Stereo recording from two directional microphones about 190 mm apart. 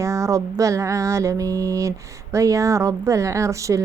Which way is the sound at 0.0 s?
15° right (ahead or behind).